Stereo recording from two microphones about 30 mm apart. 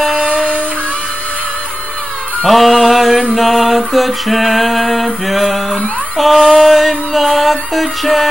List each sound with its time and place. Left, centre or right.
0.2 s music: right
2.4 s music: centre
3.3 s a sound: centre